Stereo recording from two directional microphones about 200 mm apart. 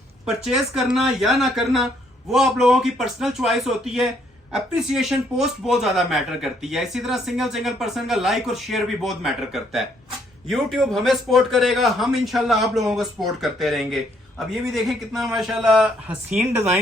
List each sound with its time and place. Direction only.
0.4 s a man's voice: centre (ahead or behind)